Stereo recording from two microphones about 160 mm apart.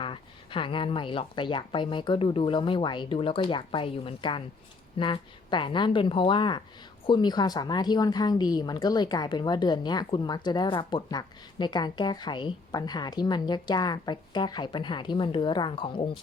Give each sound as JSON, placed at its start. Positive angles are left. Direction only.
{"t": 0.0, "sound": "speech", "side_deg": 30}